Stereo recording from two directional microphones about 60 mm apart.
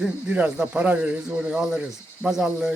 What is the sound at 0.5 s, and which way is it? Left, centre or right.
A man's voice, centre.